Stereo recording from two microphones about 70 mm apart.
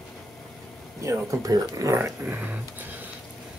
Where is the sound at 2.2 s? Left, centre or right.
Right.